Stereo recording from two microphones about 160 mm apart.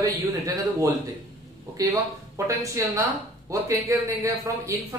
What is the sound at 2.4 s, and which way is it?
A man's voice, 20° right (ahead or behind).